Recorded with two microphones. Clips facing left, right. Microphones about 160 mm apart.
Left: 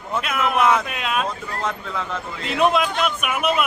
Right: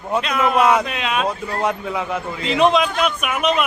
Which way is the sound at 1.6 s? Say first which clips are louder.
Right 5 dB; 15° right (ahead or behind).